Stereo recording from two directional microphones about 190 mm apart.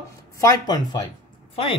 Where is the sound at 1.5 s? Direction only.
30° left (ahead or behind).